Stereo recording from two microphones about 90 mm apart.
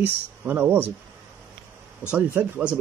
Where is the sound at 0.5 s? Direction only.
25° right (ahead or behind).